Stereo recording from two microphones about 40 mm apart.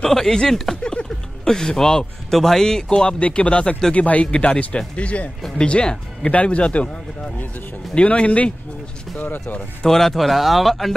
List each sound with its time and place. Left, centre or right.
0.0 s speech: centre
0.9 s a sound: centre
2.3 s speech: centre
3.2 s speech: left
7.9 s speech: left
9.2 s speech: left
9.8 s speech: centre